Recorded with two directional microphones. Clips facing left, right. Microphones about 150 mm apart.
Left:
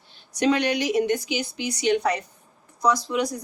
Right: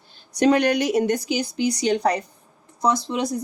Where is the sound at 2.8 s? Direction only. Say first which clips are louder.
Even; 25° right (ahead or behind).